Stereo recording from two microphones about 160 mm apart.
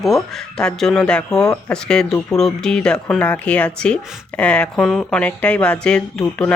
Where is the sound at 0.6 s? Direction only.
5° left (ahead or behind).